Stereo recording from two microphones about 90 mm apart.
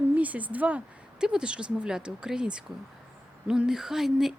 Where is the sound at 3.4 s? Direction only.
10° right (ahead or behind).